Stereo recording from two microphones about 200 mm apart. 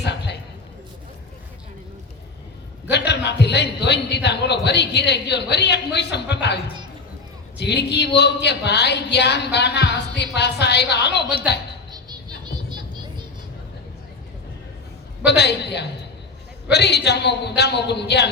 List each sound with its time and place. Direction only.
0.0 s a sound: 60° left (ahead or behind)
2.8 s a man's voice: 60° left (ahead or behind)
7.6 s a man's voice: 60° left (ahead or behind)
11.9 s music: 20° right (ahead or behind)
15.2 s a man's voice: 60° left (ahead or behind)